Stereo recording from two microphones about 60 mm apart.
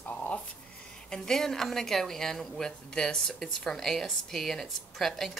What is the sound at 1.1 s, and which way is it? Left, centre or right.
Speech, centre.